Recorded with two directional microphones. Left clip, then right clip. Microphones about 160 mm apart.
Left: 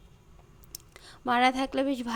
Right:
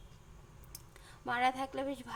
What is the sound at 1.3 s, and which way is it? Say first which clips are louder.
Speech: left 8 dB; 40° left (ahead or behind).